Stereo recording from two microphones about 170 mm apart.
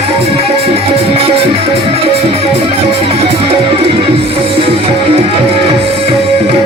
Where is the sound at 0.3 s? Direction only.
35° right (ahead or behind).